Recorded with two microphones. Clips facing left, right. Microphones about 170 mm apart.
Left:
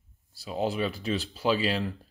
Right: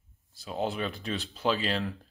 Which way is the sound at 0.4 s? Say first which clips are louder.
Left 3 dB; 5° left (ahead or behind).